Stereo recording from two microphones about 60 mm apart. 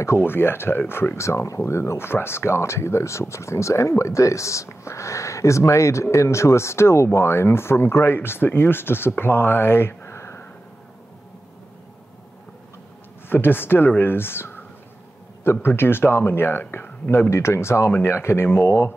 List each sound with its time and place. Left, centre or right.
0.2 s speech: left
13.3 s speech: left
15.6 s speech: left